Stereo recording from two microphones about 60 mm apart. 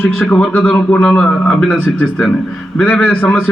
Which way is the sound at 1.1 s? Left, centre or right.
Centre.